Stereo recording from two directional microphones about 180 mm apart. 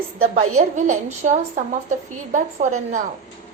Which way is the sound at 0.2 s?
40° right (ahead or behind).